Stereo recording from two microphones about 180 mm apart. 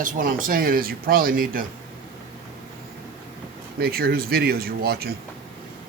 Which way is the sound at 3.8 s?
60° right (ahead or behind).